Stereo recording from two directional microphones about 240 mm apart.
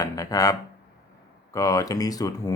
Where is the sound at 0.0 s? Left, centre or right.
Centre.